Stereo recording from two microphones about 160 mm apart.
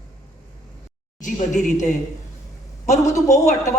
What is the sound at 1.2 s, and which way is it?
A woman's voice, 50° left (ahead or behind).